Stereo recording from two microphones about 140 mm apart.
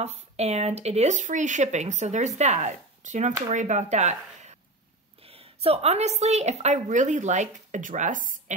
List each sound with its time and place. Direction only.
0.0 s speech: 50° right (ahead or behind)
5.2 s a woman's voice: 45° right (ahead or behind); by 8.5 s 65° right (ahead or behind)